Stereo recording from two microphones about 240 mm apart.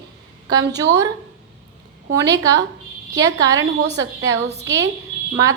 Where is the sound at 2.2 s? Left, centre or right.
Centre.